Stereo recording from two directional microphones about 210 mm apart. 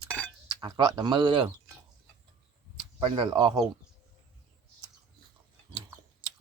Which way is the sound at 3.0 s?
25° right (ahead or behind).